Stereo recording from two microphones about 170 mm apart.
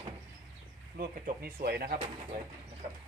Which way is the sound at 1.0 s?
60° right (ahead or behind).